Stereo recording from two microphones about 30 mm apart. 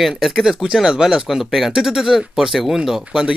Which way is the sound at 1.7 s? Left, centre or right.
Centre.